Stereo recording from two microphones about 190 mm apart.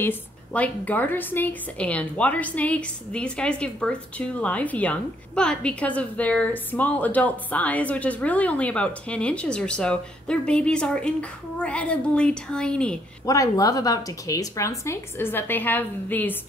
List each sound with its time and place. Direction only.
0.0 s a woman's voice: 10° left (ahead or behind)
13.2 s a woman's voice: 15° left (ahead or behind)